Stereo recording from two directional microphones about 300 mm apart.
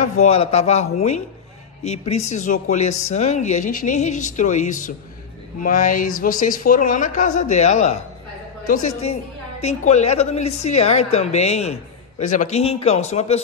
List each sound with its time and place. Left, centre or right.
0.2 s speech: left